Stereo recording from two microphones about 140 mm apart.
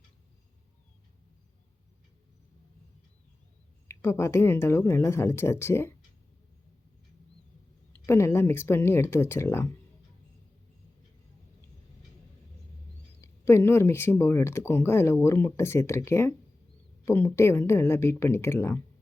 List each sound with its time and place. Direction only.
3.8 s speech: 20° left (ahead or behind)
8.0 s speech: 15° left (ahead or behind)
13.2 s speech: 20° left (ahead or behind)